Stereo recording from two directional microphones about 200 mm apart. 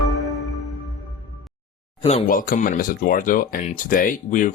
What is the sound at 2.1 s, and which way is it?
Speech, 40° left (ahead or behind).